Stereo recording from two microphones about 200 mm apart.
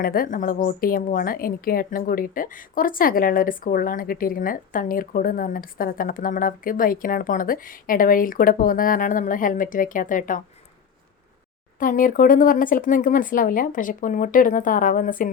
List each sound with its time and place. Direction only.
0.0 s a woman's voice: 45° left (ahead or behind)
11.8 s a woman's voice: 45° left (ahead or behind)